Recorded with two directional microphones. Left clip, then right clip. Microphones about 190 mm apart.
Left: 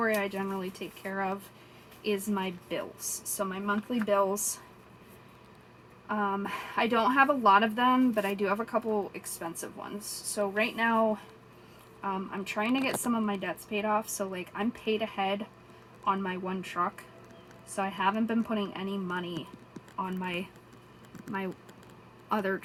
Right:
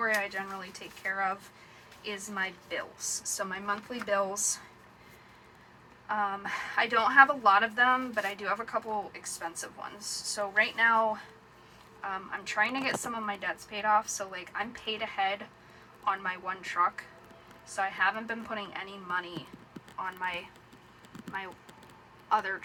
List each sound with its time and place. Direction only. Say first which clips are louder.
0.0 s speech: even; 30° left (ahead or behind)
6.1 s speech: even; 30° left (ahead or behind)
22.3 s speech: right 2 dB; 35° left (ahead or behind)